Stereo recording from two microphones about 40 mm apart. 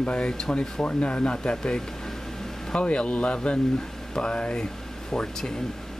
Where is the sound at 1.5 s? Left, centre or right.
Centre.